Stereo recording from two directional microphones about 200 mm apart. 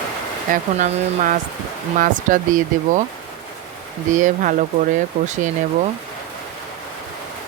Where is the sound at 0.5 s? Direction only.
40° right (ahead or behind).